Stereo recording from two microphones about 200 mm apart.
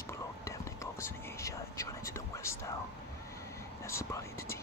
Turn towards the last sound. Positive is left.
turn(degrees=15)  # may be behind; listen again after turning